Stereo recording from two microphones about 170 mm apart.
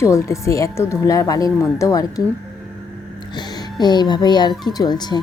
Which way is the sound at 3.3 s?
25° left (ahead or behind).